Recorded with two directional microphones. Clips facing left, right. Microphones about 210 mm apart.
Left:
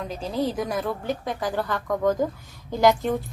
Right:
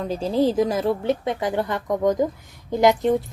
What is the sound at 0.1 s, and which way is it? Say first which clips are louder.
A woman's voice: right 7 dB; 30° right (ahead or behind).